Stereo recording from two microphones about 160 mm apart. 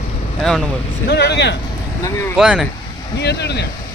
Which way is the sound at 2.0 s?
20° left (ahead or behind).